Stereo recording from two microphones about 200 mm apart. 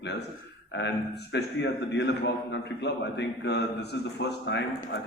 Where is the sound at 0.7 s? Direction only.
60° left (ahead or behind).